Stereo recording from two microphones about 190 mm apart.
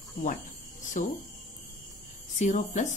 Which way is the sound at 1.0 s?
40° left (ahead or behind).